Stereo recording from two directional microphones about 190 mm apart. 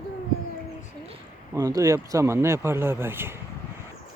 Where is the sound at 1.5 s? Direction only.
20° right (ahead or behind).